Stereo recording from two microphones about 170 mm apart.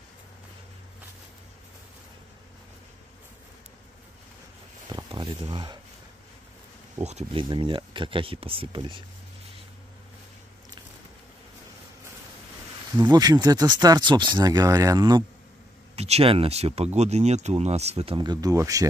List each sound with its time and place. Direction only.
4.8 s a sound: 25° right (ahead or behind)
7.0 s speech: 40° right (ahead or behind)
12.9 s speech: 25° right (ahead or behind)
16.0 s speech: 35° right (ahead or behind); by 18.9 s 20° right (ahead or behind)